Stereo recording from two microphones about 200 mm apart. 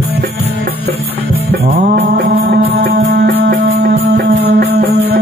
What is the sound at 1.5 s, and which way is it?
Mantra, 50° right (ahead or behind).